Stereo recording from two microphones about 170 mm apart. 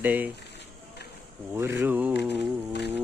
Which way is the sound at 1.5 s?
15° right (ahead or behind).